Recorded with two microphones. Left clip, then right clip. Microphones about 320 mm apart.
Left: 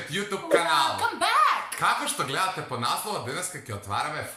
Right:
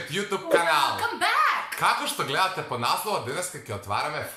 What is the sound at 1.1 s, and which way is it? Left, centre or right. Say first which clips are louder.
Speech: left 1 dB; centre.